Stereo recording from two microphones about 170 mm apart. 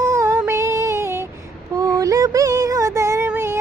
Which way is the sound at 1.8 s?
20° right (ahead or behind).